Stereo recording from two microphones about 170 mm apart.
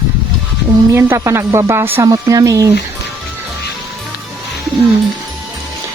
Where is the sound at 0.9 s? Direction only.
15° right (ahead or behind).